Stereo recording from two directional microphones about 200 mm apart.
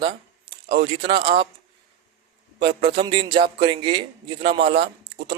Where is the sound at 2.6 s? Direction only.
25° right (ahead or behind).